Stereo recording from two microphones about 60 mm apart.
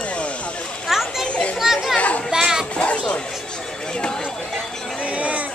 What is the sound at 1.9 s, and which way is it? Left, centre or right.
Children playing, left.